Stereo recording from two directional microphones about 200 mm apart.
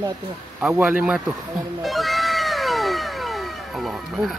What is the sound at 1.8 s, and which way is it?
Cat, centre (ahead or behind).